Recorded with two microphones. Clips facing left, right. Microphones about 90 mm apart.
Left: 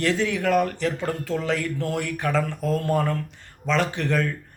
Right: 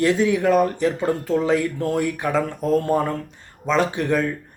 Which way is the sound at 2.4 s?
30° right (ahead or behind).